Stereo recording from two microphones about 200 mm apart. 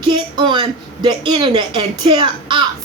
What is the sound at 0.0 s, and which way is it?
Speech, 25° right (ahead or behind).